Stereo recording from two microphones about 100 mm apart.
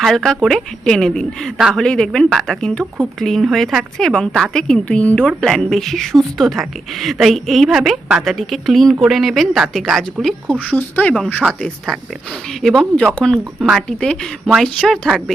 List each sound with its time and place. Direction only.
0.4 s a woman's voice: 5° left (ahead or behind)
10.7 s speech: 15° left (ahead or behind)
11.4 s speech: 10° right (ahead or behind)
12.6 s a woman's voice: 5° left (ahead or behind)
13.8 s a woman's voice: 10° left (ahead or behind)